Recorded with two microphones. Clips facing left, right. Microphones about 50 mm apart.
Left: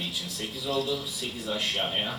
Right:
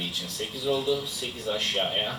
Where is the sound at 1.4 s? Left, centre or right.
Centre.